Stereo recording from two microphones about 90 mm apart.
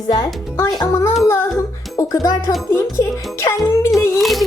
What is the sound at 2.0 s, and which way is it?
Speech, 40° left (ahead or behind).